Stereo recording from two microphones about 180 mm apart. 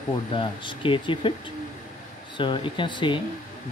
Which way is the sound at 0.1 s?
25° left (ahead or behind).